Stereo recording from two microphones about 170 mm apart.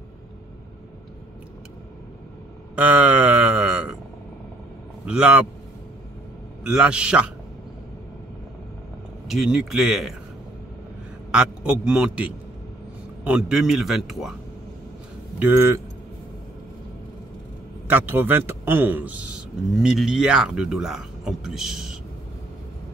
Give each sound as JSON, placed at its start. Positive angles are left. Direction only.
{"t": 2.7, "sound": "a sound", "side_deg": -5}
{"t": 5.0, "sound": "speech", "side_deg": -5}
{"t": 6.7, "sound": "a man's voice", "side_deg": -5}
{"t": 9.3, "sound": "a man's voice", "side_deg": 0}
{"t": 11.3, "sound": "a man's voice", "side_deg": -5}
{"t": 15.3, "sound": "speech", "side_deg": -15}
{"t": 17.8, "sound": "a man's voice", "side_deg": -10}